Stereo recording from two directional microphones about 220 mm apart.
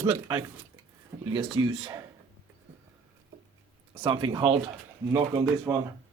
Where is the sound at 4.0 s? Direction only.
20° right (ahead or behind).